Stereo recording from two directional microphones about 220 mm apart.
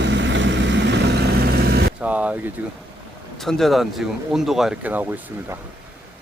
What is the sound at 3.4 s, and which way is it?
Speech, centre (ahead or behind).